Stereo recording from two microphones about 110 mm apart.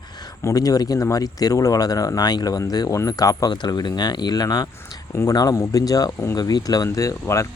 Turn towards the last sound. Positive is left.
turn(degrees=25)  # may be behind; listen again after turning